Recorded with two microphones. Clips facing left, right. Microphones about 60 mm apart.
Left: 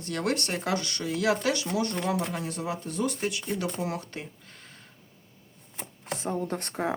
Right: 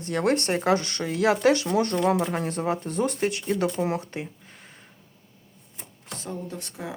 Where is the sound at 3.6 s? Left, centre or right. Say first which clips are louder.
Right 6 dB; right.